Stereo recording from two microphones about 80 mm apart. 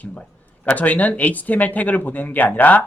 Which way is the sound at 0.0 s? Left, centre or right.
Centre.